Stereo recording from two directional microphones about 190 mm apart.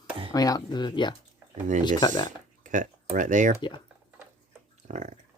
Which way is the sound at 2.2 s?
40° right (ahead or behind).